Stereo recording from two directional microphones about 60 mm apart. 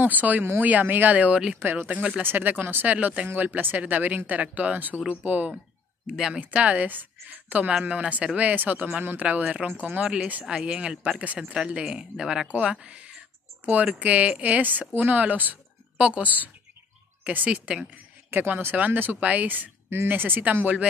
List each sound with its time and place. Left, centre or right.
0.0 s speech: right
6.0 s speech: centre
6.4 s a woman's voice: right
12.8 s a sound: centre
13.9 s speech: right
18.3 s speech: right